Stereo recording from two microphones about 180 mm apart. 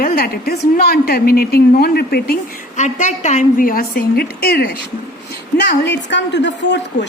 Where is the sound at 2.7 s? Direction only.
40° left (ahead or behind); by 4.7 s 60° left (ahead or behind).